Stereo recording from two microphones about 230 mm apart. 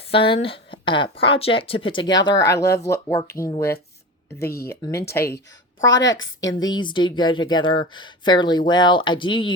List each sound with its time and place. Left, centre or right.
0.0 s speech: left
6.1 s a woman's voice: left
6.5 s speech: centre